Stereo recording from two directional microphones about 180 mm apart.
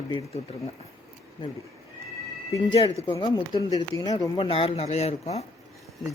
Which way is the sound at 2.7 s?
30° left (ahead or behind).